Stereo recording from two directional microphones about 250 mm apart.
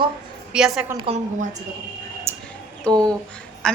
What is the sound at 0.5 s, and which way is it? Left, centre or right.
Speech, centre.